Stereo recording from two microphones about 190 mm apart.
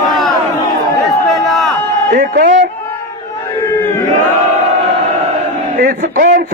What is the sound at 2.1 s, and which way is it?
Speech, 45° right (ahead or behind).